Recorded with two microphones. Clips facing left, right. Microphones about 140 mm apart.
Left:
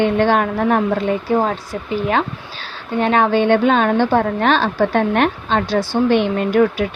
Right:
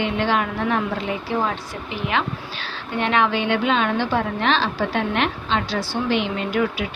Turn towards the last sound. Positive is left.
turn(degrees=45)  # may be behind; listen again after turning